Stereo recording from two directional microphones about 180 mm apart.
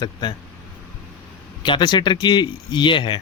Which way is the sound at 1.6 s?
25° left (ahead or behind).